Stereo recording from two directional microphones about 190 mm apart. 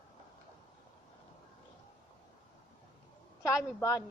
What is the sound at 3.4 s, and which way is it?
Speech, 15° left (ahead or behind).